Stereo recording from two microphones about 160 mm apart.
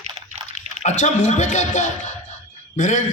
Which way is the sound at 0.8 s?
50° left (ahead or behind).